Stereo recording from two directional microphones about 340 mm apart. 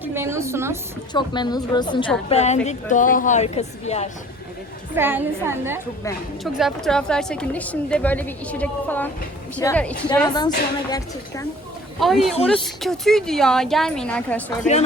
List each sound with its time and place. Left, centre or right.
0.0 s a sound: centre
1.1 s a woman's voice: centre
4.9 s a woman's voice: centre
11.9 s a woman's voice: centre
14.6 s a woman's voice: centre